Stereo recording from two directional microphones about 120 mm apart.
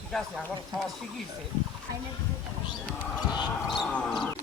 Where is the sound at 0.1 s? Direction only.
5° left (ahead or behind).